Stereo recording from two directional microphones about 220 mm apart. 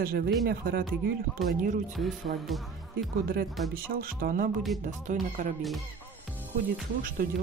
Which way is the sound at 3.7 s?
40° right (ahead or behind).